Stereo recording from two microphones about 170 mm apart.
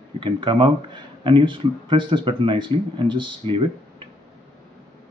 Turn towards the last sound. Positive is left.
turn(degrees=-30)  # may be behind; listen again after turning